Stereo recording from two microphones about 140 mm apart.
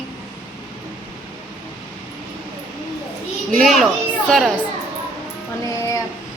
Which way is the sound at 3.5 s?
Centre (ahead or behind).